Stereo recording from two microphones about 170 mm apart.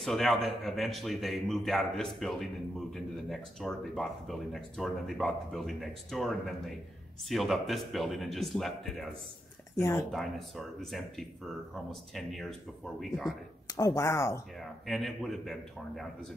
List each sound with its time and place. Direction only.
0.0 s a man's voice: centre (ahead or behind)
9.8 s speech: 15° left (ahead or behind)
10.1 s a man's voice: centre (ahead or behind)
13.7 s speech: 20° left (ahead or behind)
14.6 s a man's voice: centre (ahead or behind)